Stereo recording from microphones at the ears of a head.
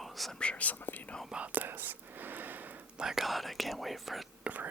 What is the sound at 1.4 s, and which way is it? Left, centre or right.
Whispering, right.